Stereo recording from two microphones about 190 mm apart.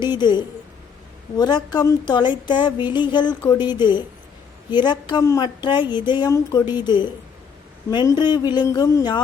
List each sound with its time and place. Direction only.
0.0 s a woman's voice: 25° left (ahead or behind)